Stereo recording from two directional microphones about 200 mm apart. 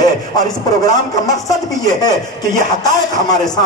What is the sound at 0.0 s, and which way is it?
A man's voice, 20° left (ahead or behind).